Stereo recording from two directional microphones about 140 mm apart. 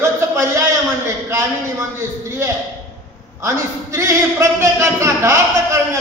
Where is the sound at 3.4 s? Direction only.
20° right (ahead or behind).